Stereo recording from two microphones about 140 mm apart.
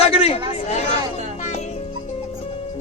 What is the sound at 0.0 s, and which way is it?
Chatter, 45° left (ahead or behind).